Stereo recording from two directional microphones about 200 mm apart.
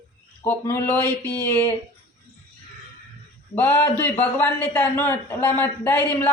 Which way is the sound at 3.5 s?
10° left (ahead or behind).